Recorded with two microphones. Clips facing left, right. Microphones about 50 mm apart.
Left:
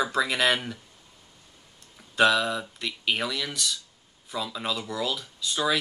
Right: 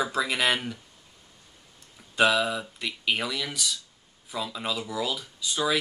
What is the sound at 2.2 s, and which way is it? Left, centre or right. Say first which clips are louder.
Speech: left 1 dB; centre.